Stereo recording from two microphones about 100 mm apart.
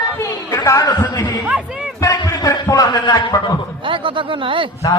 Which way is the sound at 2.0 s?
35° left (ahead or behind).